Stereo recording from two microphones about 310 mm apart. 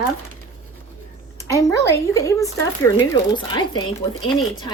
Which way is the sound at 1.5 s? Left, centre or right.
Centre.